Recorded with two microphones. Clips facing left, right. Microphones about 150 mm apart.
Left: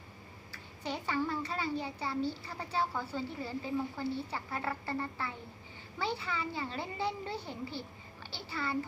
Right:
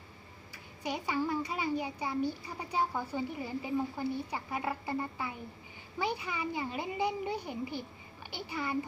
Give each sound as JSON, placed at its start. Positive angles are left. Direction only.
{"t": 0.5, "sound": "a child's voice", "side_deg": -10}